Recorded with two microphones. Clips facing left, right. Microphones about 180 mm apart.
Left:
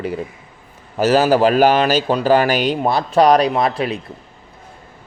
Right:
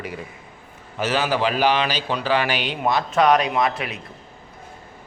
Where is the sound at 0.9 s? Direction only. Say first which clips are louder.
Left 9 dB; 40° left (ahead or behind).